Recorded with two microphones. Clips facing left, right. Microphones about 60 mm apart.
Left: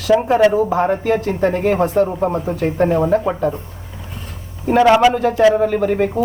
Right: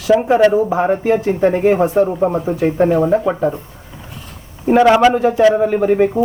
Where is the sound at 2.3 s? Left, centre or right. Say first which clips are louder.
Right 3 dB; centre.